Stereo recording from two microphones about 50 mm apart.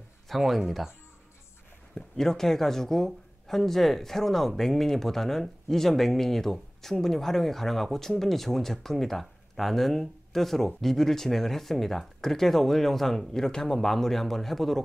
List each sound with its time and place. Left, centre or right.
0.4 s speech: centre
2.0 s speech: centre